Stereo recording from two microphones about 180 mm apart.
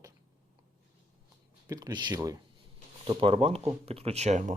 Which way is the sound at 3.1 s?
30° right (ahead or behind).